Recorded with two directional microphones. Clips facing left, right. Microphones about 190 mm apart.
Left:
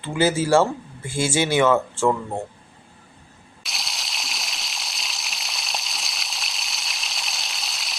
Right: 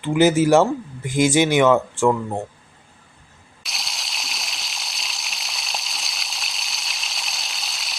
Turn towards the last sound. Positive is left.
turn(degrees=0)  # may be behind; listen again after turning